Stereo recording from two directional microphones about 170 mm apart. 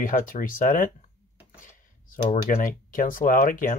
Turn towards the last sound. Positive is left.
turn(degrees=55)  # may be behind; listen again after turning